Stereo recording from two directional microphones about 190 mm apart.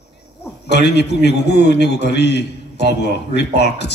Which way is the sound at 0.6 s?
60° left (ahead or behind).